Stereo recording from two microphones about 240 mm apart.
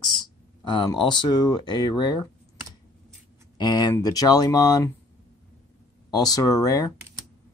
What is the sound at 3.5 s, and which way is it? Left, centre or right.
Speech, centre.